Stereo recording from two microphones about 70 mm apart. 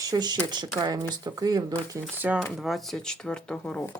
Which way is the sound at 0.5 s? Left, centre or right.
Right.